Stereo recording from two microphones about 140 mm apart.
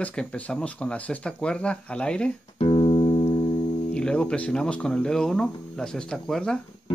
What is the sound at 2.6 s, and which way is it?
Music, 40° left (ahead or behind).